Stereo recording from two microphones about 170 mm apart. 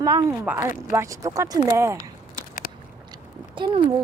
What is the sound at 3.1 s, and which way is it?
Biting, 30° right (ahead or behind).